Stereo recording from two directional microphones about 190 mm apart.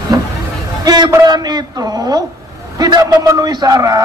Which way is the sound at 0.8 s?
20° right (ahead or behind).